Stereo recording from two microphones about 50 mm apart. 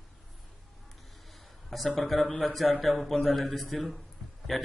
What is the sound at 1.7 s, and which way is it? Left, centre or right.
A man's voice, centre.